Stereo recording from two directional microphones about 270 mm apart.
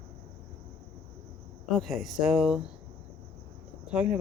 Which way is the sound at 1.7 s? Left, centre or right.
Centre.